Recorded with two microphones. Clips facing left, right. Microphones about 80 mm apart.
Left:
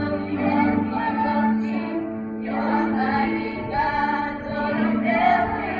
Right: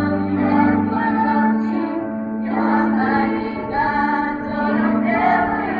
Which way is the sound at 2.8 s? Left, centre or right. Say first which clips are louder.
Right 4 dB; right.